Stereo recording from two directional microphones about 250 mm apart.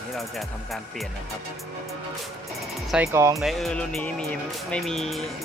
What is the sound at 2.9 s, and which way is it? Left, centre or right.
Speech, centre.